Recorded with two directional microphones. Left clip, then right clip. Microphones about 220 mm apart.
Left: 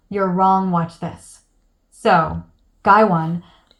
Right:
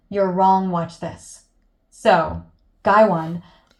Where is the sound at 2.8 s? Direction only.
25° left (ahead or behind).